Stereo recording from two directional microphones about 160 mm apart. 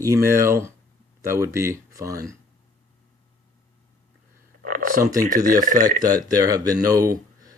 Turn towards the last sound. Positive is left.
turn(degrees=-20)  # may be behind; listen again after turning